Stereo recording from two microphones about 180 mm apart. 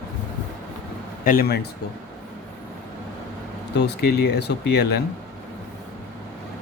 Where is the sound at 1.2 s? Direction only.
55° left (ahead or behind).